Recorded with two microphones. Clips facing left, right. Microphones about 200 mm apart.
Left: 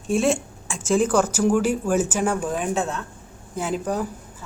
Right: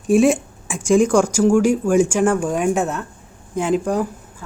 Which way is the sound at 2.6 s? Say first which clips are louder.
Right 6 dB; 15° right (ahead or behind).